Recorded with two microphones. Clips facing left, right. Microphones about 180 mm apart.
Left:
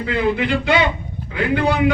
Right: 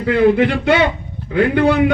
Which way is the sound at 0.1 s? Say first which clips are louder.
Right 7 dB; 55° right (ahead or behind).